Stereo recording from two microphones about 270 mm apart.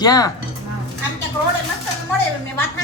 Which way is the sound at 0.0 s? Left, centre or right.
Centre.